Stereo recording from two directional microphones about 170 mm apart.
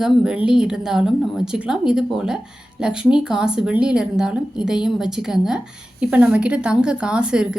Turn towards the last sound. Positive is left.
turn(degrees=-5)  # may be behind; listen again after turning